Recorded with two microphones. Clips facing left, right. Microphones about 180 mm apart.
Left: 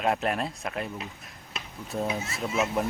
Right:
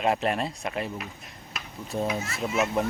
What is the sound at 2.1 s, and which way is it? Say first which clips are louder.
Speech: right 1 dB; 25° left (ahead or behind).